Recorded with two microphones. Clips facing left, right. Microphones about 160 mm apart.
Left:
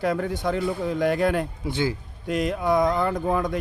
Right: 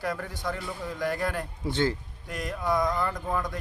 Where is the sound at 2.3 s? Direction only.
20° left (ahead or behind).